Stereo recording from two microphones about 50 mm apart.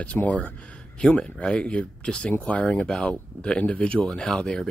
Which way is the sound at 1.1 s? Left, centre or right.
Left.